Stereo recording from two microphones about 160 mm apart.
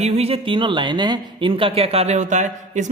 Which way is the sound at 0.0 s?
40° right (ahead or behind).